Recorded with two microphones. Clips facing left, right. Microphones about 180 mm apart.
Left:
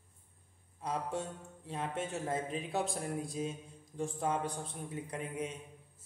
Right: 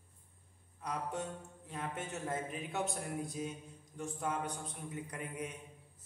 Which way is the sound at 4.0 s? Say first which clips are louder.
Left 4 dB; 30° left (ahead or behind).